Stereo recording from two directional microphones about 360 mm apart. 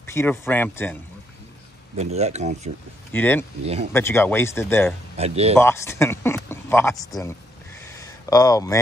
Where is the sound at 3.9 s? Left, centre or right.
Centre.